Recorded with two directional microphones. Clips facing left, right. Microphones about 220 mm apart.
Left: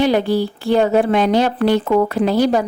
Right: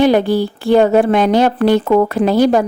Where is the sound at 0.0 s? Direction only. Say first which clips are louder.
Right 3 dB; 50° right (ahead or behind).